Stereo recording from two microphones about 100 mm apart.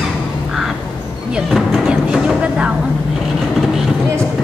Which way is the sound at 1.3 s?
5° right (ahead or behind).